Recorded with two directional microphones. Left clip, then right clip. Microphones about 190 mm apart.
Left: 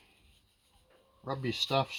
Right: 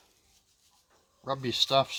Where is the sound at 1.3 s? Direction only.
25° left (ahead or behind).